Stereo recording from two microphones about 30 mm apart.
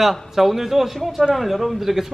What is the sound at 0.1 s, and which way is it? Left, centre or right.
Speech, centre.